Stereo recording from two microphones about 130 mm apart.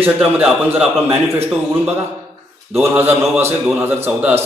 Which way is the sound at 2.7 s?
15° right (ahead or behind).